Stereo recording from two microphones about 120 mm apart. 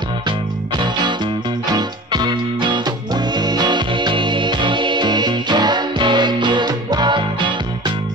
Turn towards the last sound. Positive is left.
turn(degrees=-40)  # may be behind; listen again after turning